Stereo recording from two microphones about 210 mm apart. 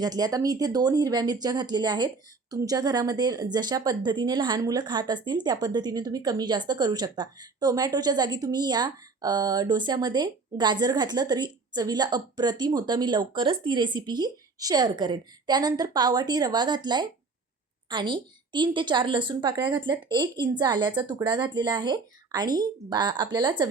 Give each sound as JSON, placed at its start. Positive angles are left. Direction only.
{"t": 0.0, "sound": "speech", "side_deg": -20}